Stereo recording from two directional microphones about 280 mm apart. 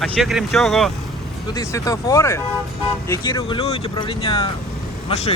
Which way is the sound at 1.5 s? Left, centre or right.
Centre.